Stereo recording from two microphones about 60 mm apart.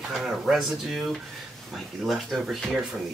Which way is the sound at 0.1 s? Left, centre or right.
Centre.